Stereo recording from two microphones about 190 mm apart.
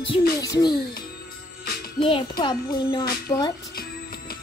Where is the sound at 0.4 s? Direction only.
20° left (ahead or behind).